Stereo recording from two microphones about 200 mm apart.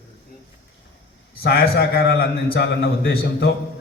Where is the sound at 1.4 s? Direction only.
50° left (ahead or behind).